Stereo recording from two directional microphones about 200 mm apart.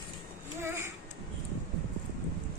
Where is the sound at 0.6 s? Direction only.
10° right (ahead or behind).